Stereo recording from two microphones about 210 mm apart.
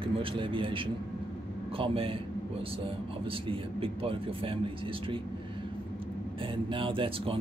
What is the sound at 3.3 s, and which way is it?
Speech, 25° right (ahead or behind).